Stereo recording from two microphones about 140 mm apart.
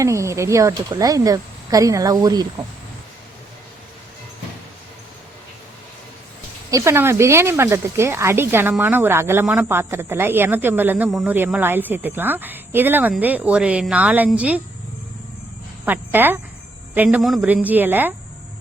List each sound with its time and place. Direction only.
0.0 s speech: 20° right (ahead or behind)
6.7 s speech: 20° right (ahead or behind)
15.9 s speech: 15° right (ahead or behind)